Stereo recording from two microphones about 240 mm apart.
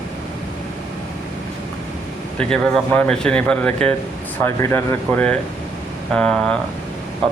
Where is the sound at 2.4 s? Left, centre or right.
Centre.